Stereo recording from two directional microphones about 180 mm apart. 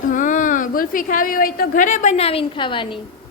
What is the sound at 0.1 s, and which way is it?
A woman's voice, 45° left (ahead or behind).